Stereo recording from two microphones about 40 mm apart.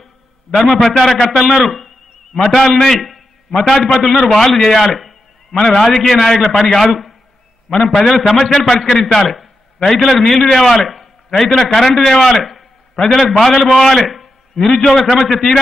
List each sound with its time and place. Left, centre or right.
0.6 s a man's voice: centre
1.5 s a man's voice: centre
2.3 s a man's voice: centre
8.7 s a man's voice: left
9.0 s a man's voice: centre